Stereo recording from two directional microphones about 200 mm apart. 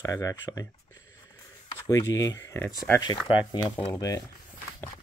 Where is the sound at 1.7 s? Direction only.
20° left (ahead or behind).